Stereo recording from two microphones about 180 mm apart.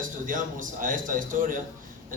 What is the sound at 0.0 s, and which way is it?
A man's voice, 45° right (ahead or behind).